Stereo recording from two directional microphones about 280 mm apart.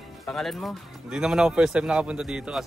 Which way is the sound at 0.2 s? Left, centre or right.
Centre.